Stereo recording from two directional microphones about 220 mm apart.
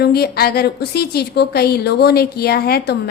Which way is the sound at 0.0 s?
45° left (ahead or behind).